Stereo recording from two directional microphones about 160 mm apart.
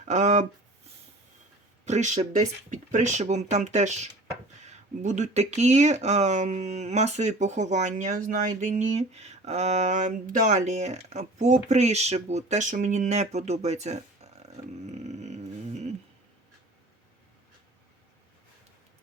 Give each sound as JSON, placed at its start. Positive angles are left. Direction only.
{"t": 0.1, "sound": "speech", "side_deg": -50}
{"t": 1.8, "sound": "speech", "side_deg": -45}